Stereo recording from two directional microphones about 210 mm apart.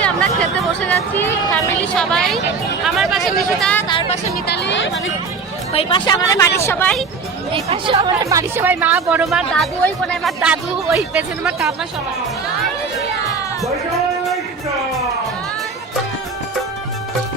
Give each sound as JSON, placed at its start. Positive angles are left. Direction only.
{"t": 0.8, "sound": "speech", "side_deg": 5}
{"t": 3.8, "sound": "speech", "side_deg": 25}
{"t": 4.4, "sound": "speech", "side_deg": 55}
{"t": 5.7, "sound": "speech", "side_deg": 20}
{"t": 7.5, "sound": "speech", "side_deg": -25}